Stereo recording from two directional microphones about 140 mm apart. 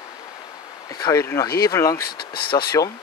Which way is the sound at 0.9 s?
25° left (ahead or behind).